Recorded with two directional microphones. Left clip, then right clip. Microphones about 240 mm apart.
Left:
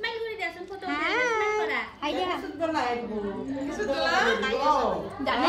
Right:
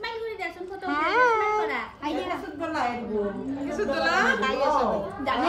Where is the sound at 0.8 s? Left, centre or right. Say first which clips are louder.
Right 4 dB; centre.